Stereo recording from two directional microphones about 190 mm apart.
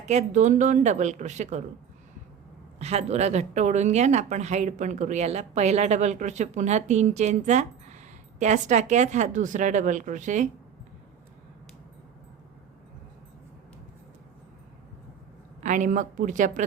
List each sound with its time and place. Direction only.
0.0 s speech: 35° right (ahead or behind)
2.7 s speech: 35° right (ahead or behind)
15.6 s speech: 40° right (ahead or behind)